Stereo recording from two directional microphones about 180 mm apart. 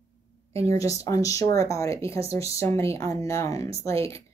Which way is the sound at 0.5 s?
15° left (ahead or behind).